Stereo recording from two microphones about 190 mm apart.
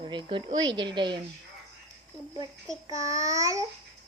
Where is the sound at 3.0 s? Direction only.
15° right (ahead or behind).